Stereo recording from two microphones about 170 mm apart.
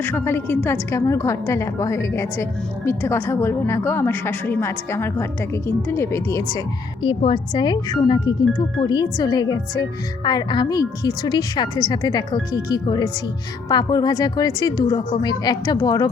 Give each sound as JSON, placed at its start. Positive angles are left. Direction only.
{"t": 0.0, "sound": "a woman's voice", "side_deg": 15}
{"t": 7.0, "sound": "speech", "side_deg": 30}